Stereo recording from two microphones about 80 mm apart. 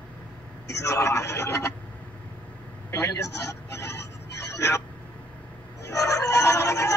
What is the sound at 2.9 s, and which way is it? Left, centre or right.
Vehicle, left.